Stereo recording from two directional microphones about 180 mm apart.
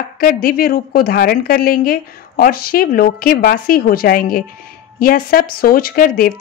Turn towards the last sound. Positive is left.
turn(degrees=55)  # may be behind; listen again after turning